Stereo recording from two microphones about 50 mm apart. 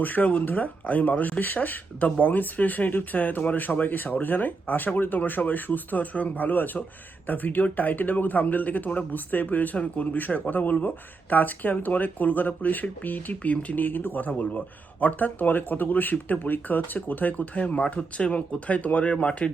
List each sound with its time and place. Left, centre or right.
0.0 s speech: left